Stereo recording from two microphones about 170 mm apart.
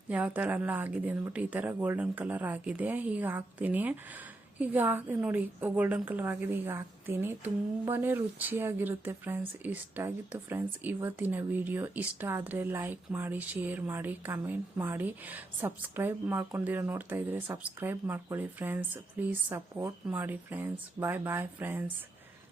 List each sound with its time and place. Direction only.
0.1 s speech: 10° right (ahead or behind)